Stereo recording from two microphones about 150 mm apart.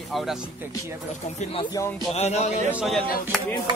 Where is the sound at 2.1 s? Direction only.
45° left (ahead or behind).